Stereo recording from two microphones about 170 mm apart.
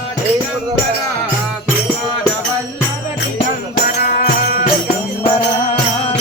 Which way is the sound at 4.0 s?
60° left (ahead or behind).